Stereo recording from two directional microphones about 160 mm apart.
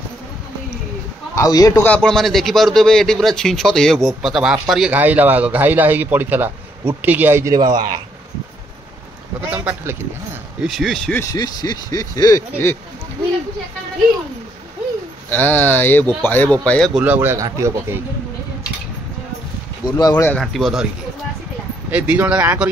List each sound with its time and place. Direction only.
1.3 s speech: 20° left (ahead or behind)
1.9 s a man's voice: 5° left (ahead or behind); by 8.0 s 25° right (ahead or behind)
9.5 s speech: 10° right (ahead or behind)
10.8 s a man's voice: centre (ahead or behind)
11.1 s speech: 25° left (ahead or behind)
15.2 s speech: 10° left (ahead or behind)
16.9 s speech: 10° right (ahead or behind)
20.0 s speech: 25° left (ahead or behind)
20.2 s a man's voice: centre (ahead or behind)
21.9 s speech: 10° right (ahead or behind)